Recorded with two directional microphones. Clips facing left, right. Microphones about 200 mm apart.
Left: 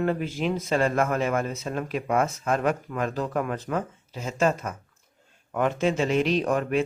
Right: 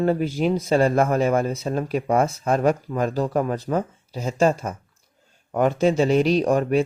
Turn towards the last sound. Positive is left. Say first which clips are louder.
# right 5 dB
turn(degrees=-35)  # may be behind; listen again after turning